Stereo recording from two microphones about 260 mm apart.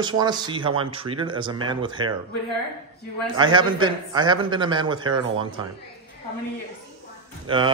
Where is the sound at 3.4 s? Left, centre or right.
Centre.